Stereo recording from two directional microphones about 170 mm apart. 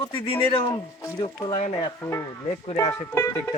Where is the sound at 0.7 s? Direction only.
20° left (ahead or behind).